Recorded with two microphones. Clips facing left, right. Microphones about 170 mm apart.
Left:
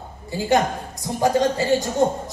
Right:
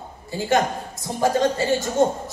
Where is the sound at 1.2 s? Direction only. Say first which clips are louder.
Left 1 dB; 20° left (ahead or behind).